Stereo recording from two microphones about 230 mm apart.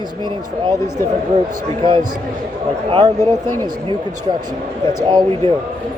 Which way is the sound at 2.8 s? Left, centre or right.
Centre.